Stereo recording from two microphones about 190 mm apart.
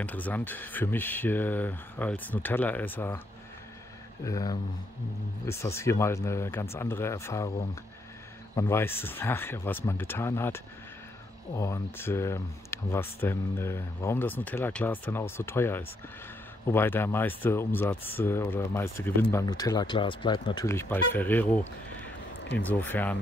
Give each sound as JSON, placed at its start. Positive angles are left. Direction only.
{"t": 0.0, "sound": "speech", "side_deg": 10}
{"t": 4.2, "sound": "speech", "side_deg": 20}
{"t": 20.6, "sound": "speech", "side_deg": 10}
{"t": 22.7, "sound": "speech", "side_deg": 10}